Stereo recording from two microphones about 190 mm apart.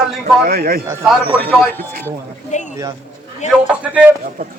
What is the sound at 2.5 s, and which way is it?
Speech, 40° left (ahead or behind).